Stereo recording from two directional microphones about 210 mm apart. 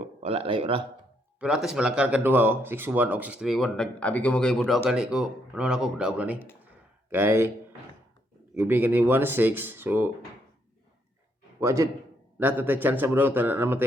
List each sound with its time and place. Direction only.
0.2 s speech: 25° right (ahead or behind)
1.4 s speech: centre (ahead or behind)
8.5 s speech: 10° right (ahead or behind)
11.6 s speech: 15° right (ahead or behind)